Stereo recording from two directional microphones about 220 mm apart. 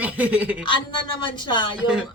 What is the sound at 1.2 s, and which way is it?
Speech, 20° left (ahead or behind).